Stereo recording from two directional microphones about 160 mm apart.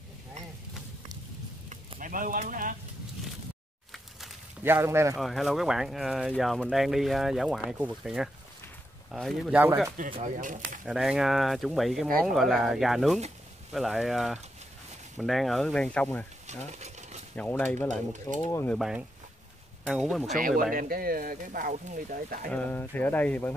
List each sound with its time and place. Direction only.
2.0 s speech: 55° right (ahead or behind)
3.9 s a sound: centre (ahead or behind)
4.6 s speech: 15° right (ahead or behind)
5.1 s speech: centre (ahead or behind)
10.0 s speech: 55° right (ahead or behind)
10.9 s speech: 5° right (ahead or behind)
16.4 s a sound: 45° right (ahead or behind)
17.4 s speech: 10° left (ahead or behind)
18.2 s speech: 20° left (ahead or behind)
18.7 s speech: 5° right (ahead or behind)
20.2 s speech: 60° right (ahead or behind)
22.5 s speech: 10° left (ahead or behind)